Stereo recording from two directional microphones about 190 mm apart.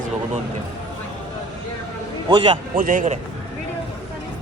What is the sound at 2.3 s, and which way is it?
Speech, 30° right (ahead or behind).